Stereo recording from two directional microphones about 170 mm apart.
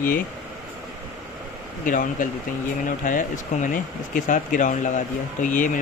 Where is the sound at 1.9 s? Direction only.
50° left (ahead or behind).